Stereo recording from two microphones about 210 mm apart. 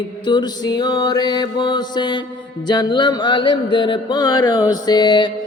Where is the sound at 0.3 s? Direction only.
20° left (ahead or behind).